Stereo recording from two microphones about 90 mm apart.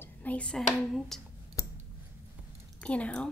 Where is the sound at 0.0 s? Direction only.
20° left (ahead or behind).